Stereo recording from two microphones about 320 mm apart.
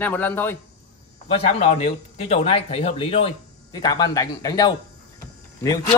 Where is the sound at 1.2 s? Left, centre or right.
Centre.